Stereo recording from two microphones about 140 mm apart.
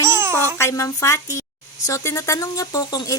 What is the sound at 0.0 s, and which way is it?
Babbling, 20° right (ahead or behind).